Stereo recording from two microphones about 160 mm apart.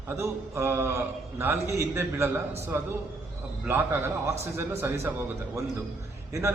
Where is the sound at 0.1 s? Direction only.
15° right (ahead or behind).